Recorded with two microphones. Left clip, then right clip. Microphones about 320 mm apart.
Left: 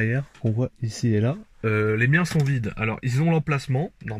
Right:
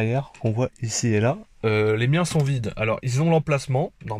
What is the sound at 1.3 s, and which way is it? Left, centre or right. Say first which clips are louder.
Speech: right 3 dB; right.